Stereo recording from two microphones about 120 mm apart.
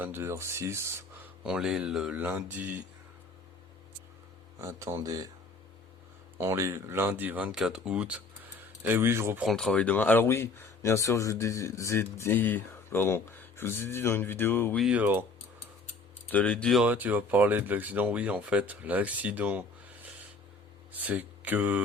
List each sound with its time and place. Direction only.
0.0 s speech: 20° right (ahead or behind)
1.5 s speech: 5° right (ahead or behind)
2.1 s speech: 15° right (ahead or behind)
4.6 s speech: 25° right (ahead or behind)
6.4 s speech: 25° right (ahead or behind)
8.9 s speech: 20° right (ahead or behind)
9.4 s speech: centre (ahead or behind); by 14.8 s 15° left (ahead or behind)
14.8 s speech: 10° right (ahead or behind)
16.3 s speech: 10° left (ahead or behind)
16.8 s speech: 15° right (ahead or behind)
20.9 s speech: 15° right (ahead or behind)